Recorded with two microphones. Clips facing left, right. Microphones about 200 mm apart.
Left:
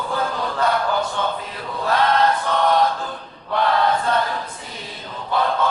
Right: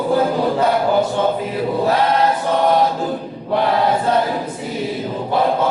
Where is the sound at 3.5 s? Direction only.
15° right (ahead or behind).